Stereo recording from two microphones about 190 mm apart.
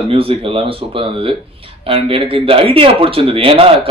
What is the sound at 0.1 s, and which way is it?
Speech, 30° right (ahead or behind).